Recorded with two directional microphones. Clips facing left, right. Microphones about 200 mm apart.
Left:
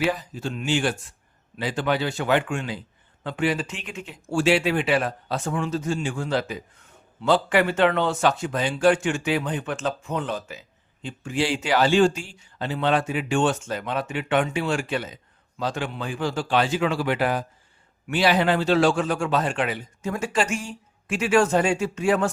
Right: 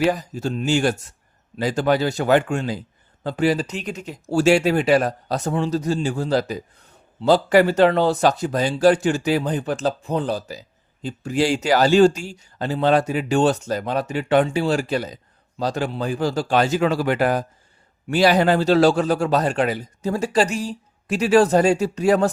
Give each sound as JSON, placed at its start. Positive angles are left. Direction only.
{"t": 0.1, "sound": "speech", "side_deg": -45}